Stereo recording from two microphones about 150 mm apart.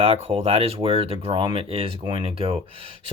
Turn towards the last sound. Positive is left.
turn(degrees=-40)  # may be behind; listen again after turning